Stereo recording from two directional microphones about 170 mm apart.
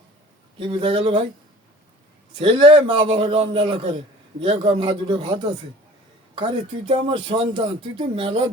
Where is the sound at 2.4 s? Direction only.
30° right (ahead or behind).